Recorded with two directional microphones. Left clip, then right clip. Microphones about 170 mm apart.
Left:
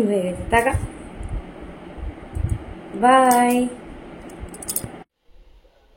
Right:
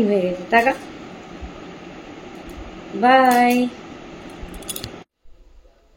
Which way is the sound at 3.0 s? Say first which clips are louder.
Right 1 dB; 20° left (ahead or behind).